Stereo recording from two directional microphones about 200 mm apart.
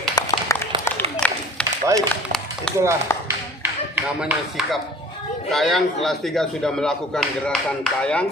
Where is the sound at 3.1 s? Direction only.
15° left (ahead or behind).